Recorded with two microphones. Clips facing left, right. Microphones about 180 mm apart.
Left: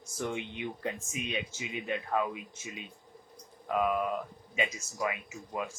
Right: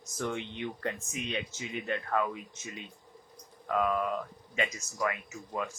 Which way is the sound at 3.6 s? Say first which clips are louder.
Even; 15° left (ahead or behind).